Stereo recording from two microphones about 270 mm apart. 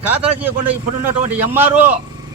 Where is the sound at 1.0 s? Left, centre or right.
Centre.